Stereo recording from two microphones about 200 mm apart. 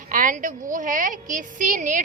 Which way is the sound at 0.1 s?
40° right (ahead or behind).